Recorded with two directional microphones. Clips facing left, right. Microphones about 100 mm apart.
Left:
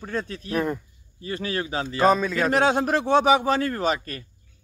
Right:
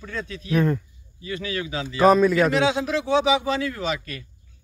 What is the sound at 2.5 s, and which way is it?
A man's voice, 50° left (ahead or behind).